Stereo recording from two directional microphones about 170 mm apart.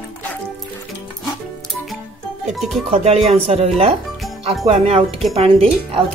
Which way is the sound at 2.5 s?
Centre (ahead or behind).